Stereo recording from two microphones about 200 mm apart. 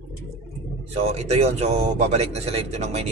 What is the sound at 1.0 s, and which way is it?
Speech, 30° right (ahead or behind).